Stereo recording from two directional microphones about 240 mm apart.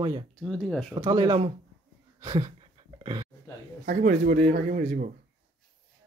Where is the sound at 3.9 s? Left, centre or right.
Right.